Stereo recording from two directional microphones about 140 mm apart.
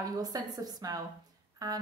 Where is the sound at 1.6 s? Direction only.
25° right (ahead or behind).